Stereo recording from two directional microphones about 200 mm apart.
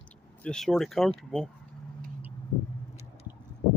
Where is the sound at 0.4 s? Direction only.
Centre (ahead or behind).